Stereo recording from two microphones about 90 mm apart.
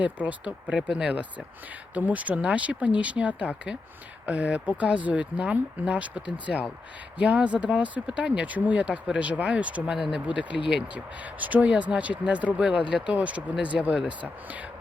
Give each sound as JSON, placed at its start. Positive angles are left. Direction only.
{"t": 0.0, "sound": "speech", "side_deg": -15}